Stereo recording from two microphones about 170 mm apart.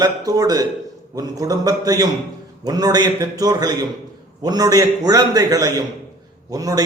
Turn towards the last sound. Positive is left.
turn(degrees=-20)  # may be behind; listen again after turning